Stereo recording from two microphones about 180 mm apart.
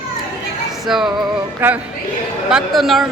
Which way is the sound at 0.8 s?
Centre (ahead or behind).